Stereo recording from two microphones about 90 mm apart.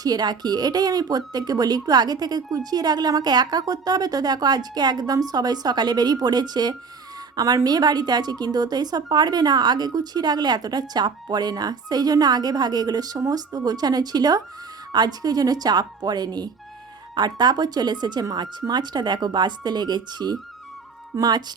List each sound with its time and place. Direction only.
0.0 s a woman's voice: 50° right (ahead or behind)